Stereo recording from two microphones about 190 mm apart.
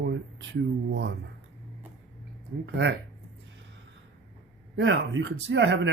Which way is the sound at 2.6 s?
65° right (ahead or behind).